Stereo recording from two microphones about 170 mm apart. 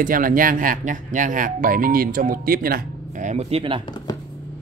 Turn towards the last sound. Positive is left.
turn(degrees=-35)  # may be behind; listen again after turning